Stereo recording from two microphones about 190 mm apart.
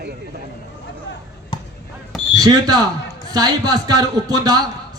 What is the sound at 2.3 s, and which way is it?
A man's voice, 20° right (ahead or behind).